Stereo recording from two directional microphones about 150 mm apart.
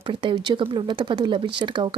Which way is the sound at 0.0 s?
35° right (ahead or behind).